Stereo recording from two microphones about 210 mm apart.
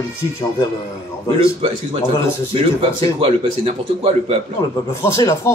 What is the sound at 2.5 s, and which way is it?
Speech, 25° right (ahead or behind).